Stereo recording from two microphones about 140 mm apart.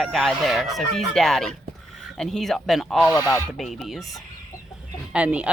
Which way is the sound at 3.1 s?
25° left (ahead or behind).